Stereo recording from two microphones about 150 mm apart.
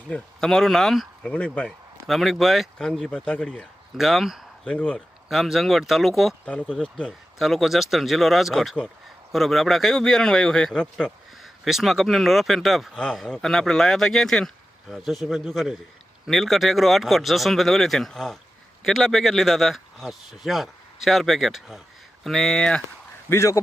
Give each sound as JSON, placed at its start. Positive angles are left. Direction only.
{"t": 0.1, "sound": "a man's voice", "side_deg": 5}
{"t": 23.3, "sound": "a man's voice", "side_deg": 20}